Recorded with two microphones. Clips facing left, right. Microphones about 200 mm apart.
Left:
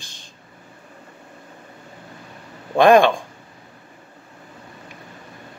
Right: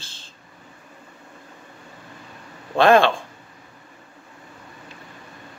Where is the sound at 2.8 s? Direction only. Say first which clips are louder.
Left 3 dB; 15° left (ahead or behind).